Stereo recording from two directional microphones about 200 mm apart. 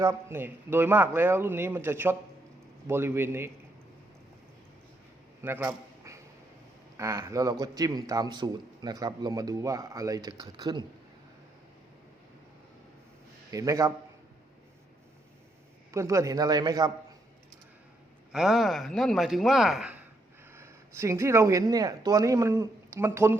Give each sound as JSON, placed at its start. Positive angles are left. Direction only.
{"t": 0.0, "sound": "a man's voice", "side_deg": -15}
{"t": 5.4, "sound": "a sound", "side_deg": -10}
{"t": 6.9, "sound": "a man's voice", "side_deg": -15}
{"t": 13.5, "sound": "a man's voice", "side_deg": -15}
{"t": 15.9, "sound": "a man's voice", "side_deg": -15}
{"t": 18.3, "sound": "speech", "side_deg": 0}